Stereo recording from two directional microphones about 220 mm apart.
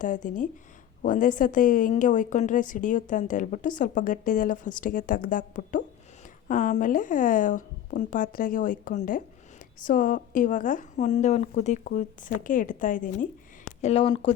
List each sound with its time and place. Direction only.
0.0 s a woman's voice: 35° left (ahead or behind)
13.8 s speech: 25° left (ahead or behind)